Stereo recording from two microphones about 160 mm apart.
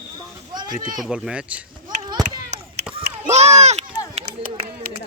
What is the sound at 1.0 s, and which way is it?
Speech, 5° right (ahead or behind).